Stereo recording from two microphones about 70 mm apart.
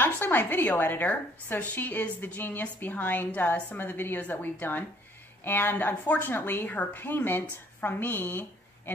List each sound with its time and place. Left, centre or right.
0.0 s a woman's voice: left